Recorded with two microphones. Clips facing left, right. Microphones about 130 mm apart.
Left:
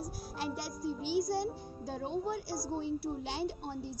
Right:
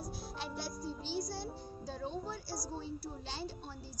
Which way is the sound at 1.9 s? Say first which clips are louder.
Left 3 dB; 55° left (ahead or behind).